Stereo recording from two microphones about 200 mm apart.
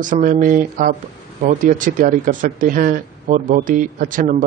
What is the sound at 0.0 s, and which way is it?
A man's voice, 40° right (ahead or behind).